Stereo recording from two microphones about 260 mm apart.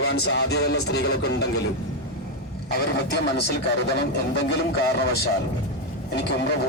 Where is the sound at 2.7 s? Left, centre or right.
Left.